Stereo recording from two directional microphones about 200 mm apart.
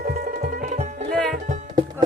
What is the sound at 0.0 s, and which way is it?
Music, 40° right (ahead or behind).